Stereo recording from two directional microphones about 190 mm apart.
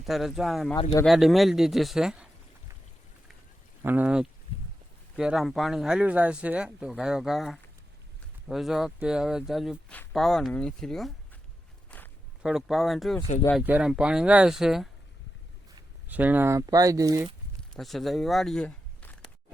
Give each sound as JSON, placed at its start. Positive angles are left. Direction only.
{"t": 0.0, "sound": "speech", "side_deg": 0}
{"t": 3.8, "sound": "speech", "side_deg": -10}
{"t": 12.4, "sound": "speech", "side_deg": -5}
{"t": 16.0, "sound": "speech", "side_deg": -10}
{"t": 17.6, "sound": "speech", "side_deg": 0}